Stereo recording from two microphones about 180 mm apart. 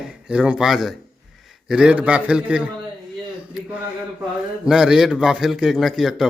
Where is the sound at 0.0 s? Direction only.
5° right (ahead or behind).